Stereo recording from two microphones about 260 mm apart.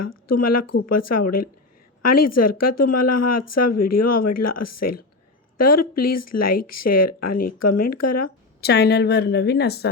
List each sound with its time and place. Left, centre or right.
0.3 s speech: left
8.6 s a woman's voice: left